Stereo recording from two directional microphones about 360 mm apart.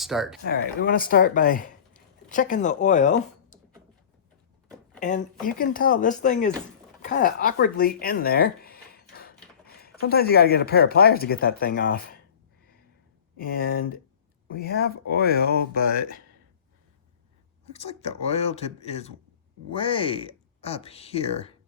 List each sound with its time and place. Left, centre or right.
0.0 s speech: centre
0.4 s speech: left
4.9 s speech: left
13.3 s speech: left
17.7 s speech: centre